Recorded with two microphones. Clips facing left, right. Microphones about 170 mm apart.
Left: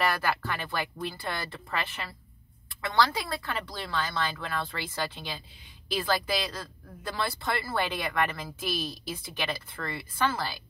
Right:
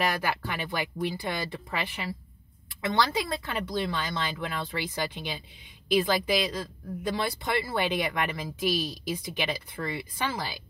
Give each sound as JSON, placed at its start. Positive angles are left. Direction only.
{"t": 0.0, "sound": "speech", "side_deg": -15}